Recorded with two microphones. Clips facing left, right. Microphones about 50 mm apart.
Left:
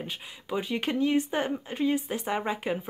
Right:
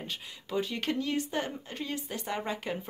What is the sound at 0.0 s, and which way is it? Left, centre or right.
Speech, centre.